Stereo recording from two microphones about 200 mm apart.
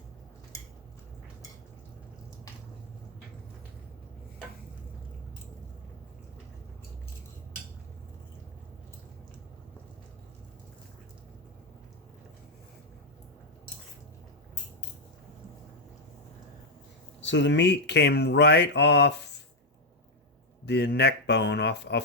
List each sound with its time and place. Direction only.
17.2 s speech: 65° left (ahead or behind)
20.7 s speech: 55° left (ahead or behind)